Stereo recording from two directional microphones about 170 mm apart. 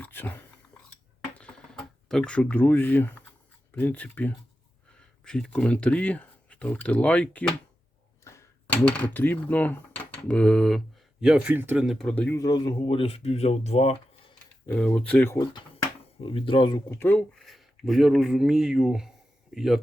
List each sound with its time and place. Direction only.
0.0 s whispering: 10° left (ahead or behind)
1.4 s typing: 5° left (ahead or behind)
3.8 s speech: 10° left (ahead or behind); by 11.9 s 10° right (ahead or behind)
11.9 s speech: 5° left (ahead or behind); by 14.3 s 40° left (ahead or behind)
14.7 s speech: 5° left (ahead or behind)
16.2 s speech: 30° left (ahead or behind)
16.9 s speech: 10° left (ahead or behind)